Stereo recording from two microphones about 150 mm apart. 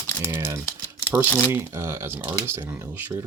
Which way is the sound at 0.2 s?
15° right (ahead or behind).